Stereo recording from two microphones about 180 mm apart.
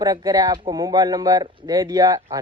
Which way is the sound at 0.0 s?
20° right (ahead or behind).